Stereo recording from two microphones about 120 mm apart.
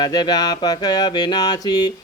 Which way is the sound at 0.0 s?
35° left (ahead or behind).